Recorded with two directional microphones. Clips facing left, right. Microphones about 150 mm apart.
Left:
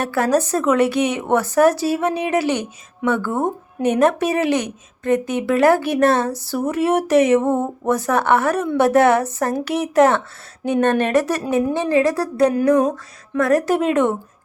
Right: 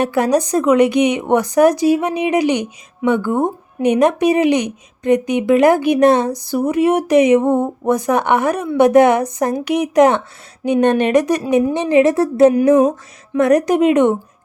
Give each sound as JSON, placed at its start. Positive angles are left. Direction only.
{"t": 0.0, "sound": "a woman's voice", "side_deg": -15}